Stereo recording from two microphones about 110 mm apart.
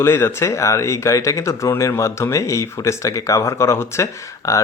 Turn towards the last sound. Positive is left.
turn(degrees=25)  # may be behind; listen again after turning